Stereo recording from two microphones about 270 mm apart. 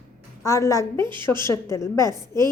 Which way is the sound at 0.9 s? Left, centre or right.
Centre.